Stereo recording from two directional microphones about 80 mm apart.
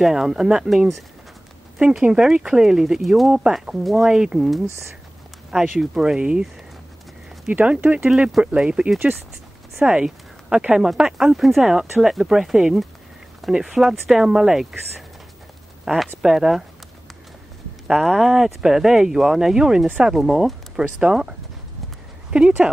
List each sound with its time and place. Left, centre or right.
0.0 s speech: centre
17.8 s speech: centre